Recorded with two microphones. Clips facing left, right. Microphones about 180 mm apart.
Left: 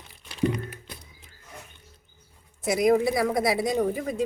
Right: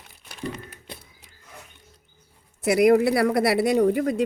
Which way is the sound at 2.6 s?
70° right (ahead or behind).